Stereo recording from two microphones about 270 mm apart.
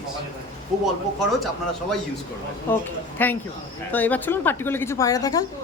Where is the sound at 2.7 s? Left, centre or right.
Centre.